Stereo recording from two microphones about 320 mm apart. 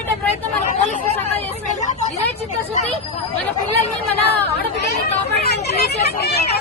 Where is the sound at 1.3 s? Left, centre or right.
Left.